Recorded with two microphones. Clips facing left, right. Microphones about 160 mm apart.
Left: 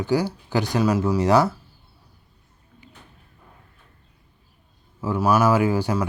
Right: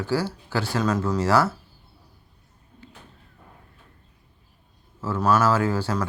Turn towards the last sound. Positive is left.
turn(degrees=15)  # may be behind; listen again after turning